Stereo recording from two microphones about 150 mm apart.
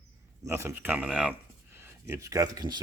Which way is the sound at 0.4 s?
15° right (ahead or behind).